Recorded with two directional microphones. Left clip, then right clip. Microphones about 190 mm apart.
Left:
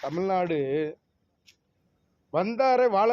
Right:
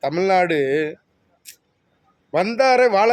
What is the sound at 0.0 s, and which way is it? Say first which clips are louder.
Speech: right 9 dB; 20° right (ahead or behind).